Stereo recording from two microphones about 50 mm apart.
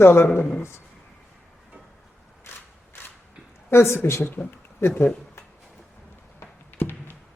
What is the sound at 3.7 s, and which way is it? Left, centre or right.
Speech, left.